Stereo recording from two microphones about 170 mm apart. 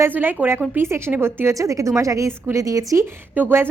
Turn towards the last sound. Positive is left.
turn(degrees=-10)  # may be behind; listen again after turning